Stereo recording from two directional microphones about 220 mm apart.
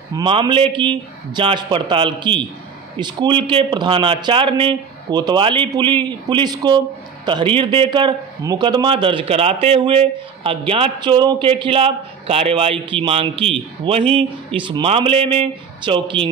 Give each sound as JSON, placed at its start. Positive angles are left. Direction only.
{"t": 0.1, "sound": "a man's voice", "side_deg": -20}